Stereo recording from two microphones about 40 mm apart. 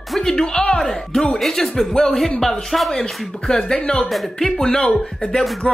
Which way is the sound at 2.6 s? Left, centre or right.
Centre.